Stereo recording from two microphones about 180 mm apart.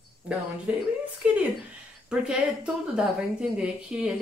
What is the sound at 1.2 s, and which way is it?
Speech, 5° right (ahead or behind).